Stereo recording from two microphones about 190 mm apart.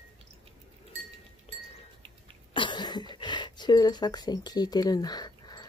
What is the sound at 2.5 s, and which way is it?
Cough, 25° left (ahead or behind).